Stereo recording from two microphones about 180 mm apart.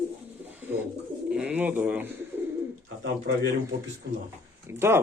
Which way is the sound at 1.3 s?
5° right (ahead or behind).